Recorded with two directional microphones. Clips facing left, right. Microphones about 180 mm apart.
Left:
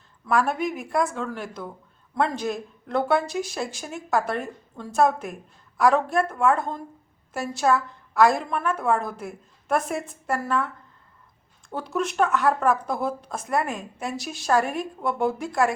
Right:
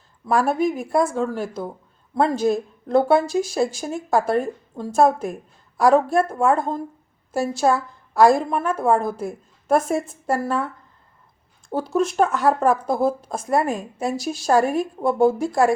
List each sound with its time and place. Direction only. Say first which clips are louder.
0.3 s speech: right 4 dB; 35° right (ahead or behind)
11.7 s speech: right 6 dB; 35° right (ahead or behind)